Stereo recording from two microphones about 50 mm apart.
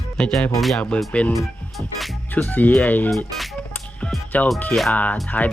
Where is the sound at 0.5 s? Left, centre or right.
Centre.